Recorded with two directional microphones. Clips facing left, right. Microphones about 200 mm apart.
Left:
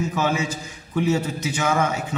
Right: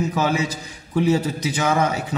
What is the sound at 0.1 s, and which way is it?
A man's voice, 35° right (ahead or behind).